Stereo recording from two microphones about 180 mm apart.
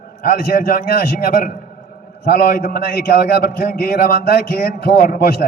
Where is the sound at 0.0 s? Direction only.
50° left (ahead or behind).